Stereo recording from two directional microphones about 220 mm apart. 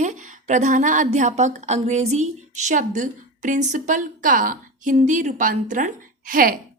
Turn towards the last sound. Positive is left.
turn(degrees=-40)  # may be behind; listen again after turning